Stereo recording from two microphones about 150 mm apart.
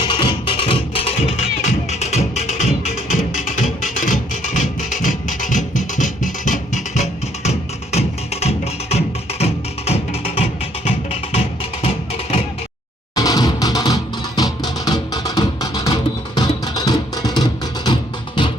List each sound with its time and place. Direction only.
0.1 s music: 35° left (ahead or behind)
13.1 s music: 25° left (ahead or behind)